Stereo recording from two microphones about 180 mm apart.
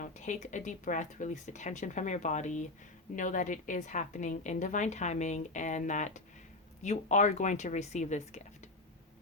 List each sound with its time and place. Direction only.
0.0 s a woman's voice: 40° left (ahead or behind)